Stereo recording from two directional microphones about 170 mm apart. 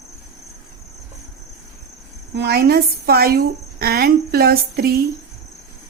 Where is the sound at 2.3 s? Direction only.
70° right (ahead or behind).